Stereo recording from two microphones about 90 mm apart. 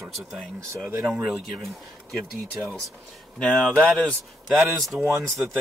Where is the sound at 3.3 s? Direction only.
15° left (ahead or behind).